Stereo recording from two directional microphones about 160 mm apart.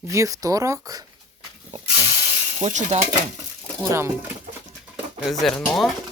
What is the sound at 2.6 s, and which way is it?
Speech, 45° right (ahead or behind).